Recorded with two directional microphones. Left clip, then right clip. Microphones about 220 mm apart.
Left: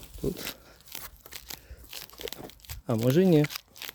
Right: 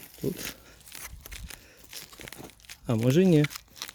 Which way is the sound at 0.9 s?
35° left (ahead or behind).